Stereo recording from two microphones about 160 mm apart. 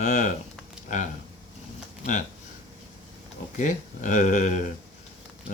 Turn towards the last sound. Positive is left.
turn(degrees=50)  # may be behind; listen again after turning